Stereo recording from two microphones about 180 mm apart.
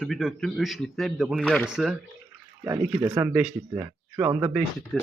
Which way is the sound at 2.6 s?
10° right (ahead or behind).